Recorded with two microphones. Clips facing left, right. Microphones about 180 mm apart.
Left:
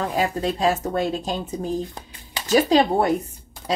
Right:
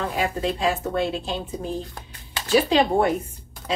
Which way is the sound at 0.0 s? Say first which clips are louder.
Left 2 dB; 40° left (ahead or behind).